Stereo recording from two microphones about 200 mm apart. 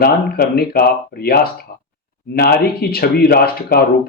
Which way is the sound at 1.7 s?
45° left (ahead or behind).